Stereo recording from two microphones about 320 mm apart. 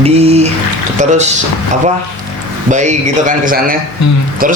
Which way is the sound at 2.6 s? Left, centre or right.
Right.